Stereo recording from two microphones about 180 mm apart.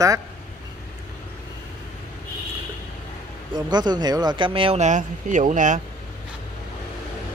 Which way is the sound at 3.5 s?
25° right (ahead or behind).